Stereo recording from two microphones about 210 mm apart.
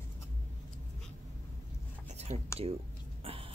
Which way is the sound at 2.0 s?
30° right (ahead or behind).